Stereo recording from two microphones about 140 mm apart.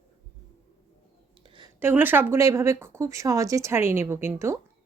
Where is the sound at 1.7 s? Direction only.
15° right (ahead or behind).